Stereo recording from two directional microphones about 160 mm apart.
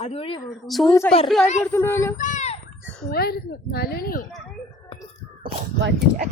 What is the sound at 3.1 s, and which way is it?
Speech, 75° left (ahead or behind).